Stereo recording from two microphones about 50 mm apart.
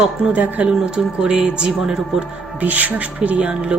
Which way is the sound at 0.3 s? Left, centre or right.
Right.